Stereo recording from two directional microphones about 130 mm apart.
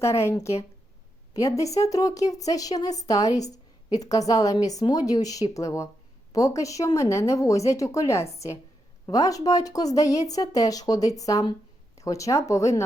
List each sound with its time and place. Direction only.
0.0 s speech: 20° left (ahead or behind)